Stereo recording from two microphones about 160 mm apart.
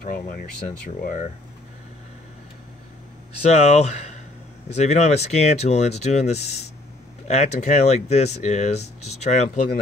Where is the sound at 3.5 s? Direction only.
45° left (ahead or behind).